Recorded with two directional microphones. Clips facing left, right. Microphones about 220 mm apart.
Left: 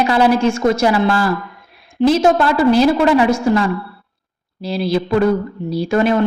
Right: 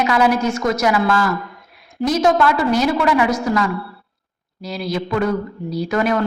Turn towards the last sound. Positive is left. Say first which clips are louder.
# left 4 dB
turn(degrees=25)  # may be behind; listen again after turning